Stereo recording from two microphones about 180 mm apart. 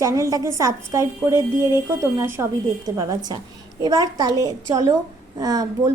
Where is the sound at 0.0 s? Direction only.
15° right (ahead or behind).